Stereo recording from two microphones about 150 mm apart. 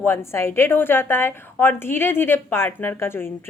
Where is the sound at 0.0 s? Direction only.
15° left (ahead or behind).